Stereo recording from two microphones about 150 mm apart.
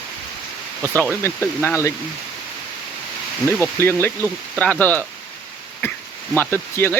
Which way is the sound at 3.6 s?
15° left (ahead or behind).